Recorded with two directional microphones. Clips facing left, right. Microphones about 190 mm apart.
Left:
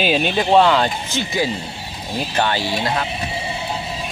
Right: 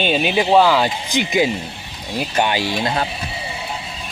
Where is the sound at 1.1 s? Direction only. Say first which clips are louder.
Right 4 dB; 15° right (ahead or behind).